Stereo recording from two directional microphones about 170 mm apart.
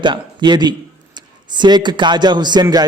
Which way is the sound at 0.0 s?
25° right (ahead or behind).